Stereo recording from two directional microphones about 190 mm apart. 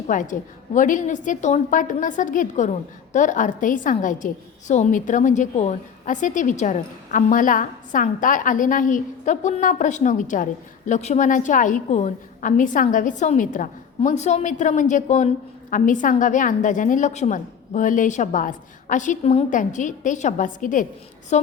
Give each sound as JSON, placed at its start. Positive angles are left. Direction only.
{"t": 0.1, "sound": "a woman's voice", "side_deg": 40}